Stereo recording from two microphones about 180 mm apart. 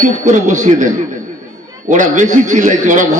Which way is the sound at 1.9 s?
45° right (ahead or behind).